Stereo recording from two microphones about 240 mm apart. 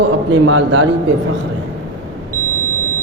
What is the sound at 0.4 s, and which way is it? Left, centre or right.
Speech, right.